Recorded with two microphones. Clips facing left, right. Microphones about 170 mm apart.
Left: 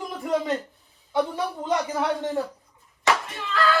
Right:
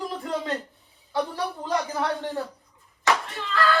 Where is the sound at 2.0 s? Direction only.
5° left (ahead or behind).